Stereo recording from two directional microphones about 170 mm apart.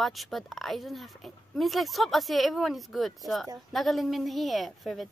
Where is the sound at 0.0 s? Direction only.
Centre (ahead or behind).